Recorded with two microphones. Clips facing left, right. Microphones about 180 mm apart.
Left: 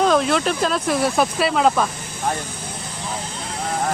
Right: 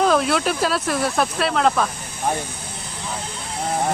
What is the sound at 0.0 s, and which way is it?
Speech, 5° right (ahead or behind).